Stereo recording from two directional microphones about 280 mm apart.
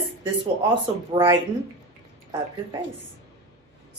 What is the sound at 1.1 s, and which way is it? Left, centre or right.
Speech, centre.